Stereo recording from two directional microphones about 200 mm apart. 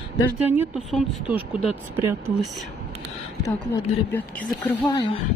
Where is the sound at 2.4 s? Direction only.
Centre (ahead or behind).